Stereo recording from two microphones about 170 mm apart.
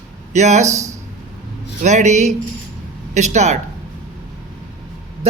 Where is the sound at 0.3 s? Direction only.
45° right (ahead or behind).